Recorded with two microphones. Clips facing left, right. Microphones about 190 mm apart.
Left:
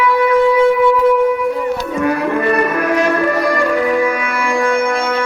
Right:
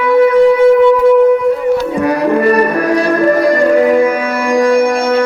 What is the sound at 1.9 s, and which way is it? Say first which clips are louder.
Music: right 4 dB; 40° right (ahead or behind).